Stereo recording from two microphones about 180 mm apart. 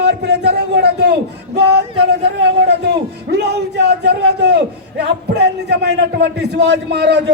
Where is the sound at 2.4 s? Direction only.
70° right (ahead or behind).